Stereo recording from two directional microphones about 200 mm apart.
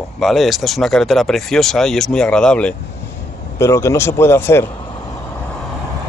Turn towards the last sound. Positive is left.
turn(degrees=10)  # may be behind; listen again after turning